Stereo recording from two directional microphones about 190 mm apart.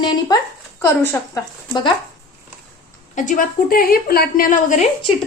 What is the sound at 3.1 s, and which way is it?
A woman's voice, 40° left (ahead or behind).